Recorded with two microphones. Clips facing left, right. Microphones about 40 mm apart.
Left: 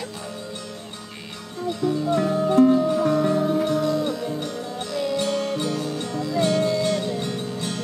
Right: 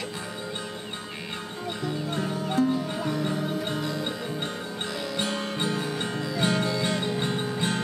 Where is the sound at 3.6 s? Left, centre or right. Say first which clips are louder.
Left 8 dB; right.